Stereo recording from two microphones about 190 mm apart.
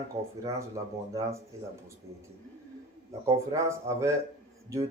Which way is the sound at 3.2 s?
15° right (ahead or behind).